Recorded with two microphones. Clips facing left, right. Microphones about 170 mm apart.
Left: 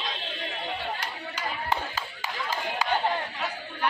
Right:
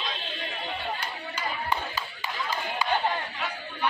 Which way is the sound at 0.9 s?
90° left.